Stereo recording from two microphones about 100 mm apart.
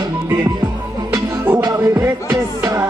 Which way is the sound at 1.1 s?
20° right (ahead or behind).